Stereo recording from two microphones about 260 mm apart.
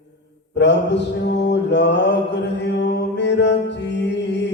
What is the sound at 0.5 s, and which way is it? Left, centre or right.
Mantra, left.